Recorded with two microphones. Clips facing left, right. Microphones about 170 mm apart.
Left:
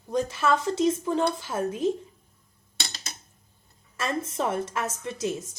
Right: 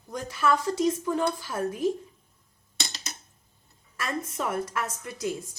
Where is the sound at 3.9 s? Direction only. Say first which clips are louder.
Left 3 dB; 25° left (ahead or behind).